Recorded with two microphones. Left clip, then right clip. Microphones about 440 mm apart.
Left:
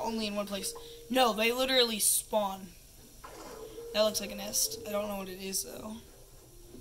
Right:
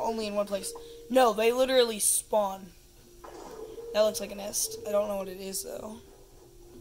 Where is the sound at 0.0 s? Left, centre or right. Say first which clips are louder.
Right 5 dB; centre.